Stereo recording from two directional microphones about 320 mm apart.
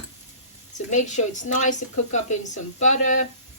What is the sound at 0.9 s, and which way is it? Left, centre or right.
Speech, left.